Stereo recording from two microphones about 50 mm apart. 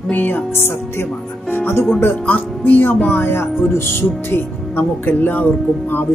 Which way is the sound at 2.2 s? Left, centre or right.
Left.